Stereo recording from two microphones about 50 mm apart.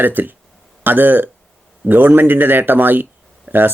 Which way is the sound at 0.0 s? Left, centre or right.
Right.